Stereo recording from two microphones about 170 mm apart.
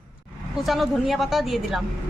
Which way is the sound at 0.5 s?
Centre (ahead or behind).